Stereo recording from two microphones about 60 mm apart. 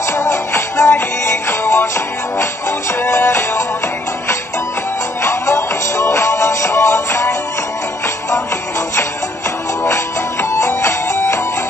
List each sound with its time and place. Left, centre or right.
0.1 s music: left
5.2 s music: left
10.5 s music: left